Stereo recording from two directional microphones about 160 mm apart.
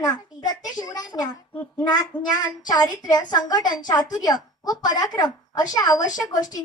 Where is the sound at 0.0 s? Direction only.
25° left (ahead or behind).